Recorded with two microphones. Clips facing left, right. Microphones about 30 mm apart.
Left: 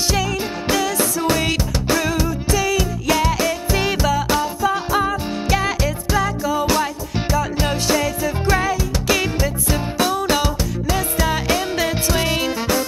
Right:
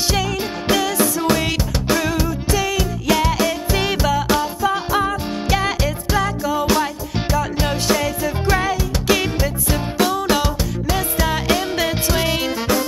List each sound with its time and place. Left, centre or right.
0.1 s music: centre